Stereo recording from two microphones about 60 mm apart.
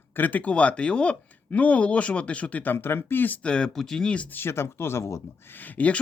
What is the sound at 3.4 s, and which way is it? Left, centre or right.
Speech, centre.